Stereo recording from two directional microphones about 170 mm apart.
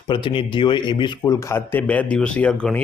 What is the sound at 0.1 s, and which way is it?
Speech, 30° left (ahead or behind).